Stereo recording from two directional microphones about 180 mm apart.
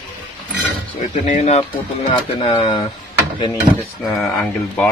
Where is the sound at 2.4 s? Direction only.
25° left (ahead or behind).